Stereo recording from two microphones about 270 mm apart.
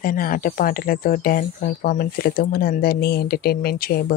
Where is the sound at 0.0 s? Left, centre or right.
Left.